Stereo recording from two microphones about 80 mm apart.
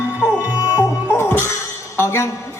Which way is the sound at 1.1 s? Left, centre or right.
Left.